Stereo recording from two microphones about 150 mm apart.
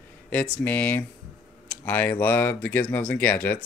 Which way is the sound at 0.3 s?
10° left (ahead or behind).